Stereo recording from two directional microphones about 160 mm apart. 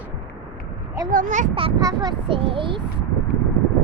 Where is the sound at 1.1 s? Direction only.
55° right (ahead or behind).